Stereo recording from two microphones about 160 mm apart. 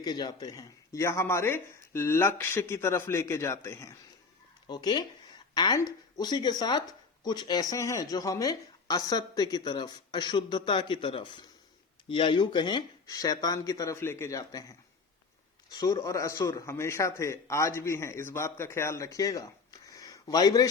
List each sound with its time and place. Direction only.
0.0 s a man's voice: 25° left (ahead or behind)